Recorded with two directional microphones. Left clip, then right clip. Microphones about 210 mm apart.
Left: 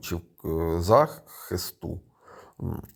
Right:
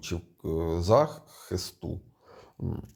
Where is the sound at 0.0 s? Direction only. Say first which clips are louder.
Left 2 dB; 20° left (ahead or behind).